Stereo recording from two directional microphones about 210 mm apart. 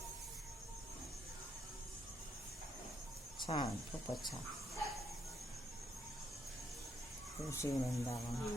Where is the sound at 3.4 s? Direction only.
25° left (ahead or behind).